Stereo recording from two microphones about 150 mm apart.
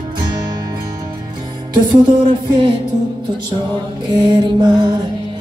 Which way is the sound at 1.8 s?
30° right (ahead or behind).